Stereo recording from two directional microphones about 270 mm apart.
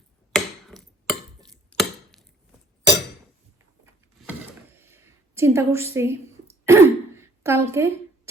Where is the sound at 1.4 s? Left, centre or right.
Centre.